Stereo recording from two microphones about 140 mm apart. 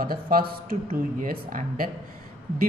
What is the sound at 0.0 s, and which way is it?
Speech, 90° right.